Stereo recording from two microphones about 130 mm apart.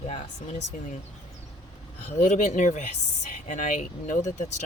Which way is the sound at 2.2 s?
65° left (ahead or behind).